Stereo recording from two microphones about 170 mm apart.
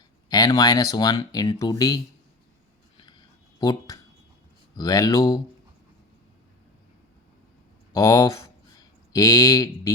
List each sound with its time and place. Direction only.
0.3 s speech: 20° left (ahead or behind)
3.6 s speech: 20° left (ahead or behind)
7.9 s speech: 20° left (ahead or behind)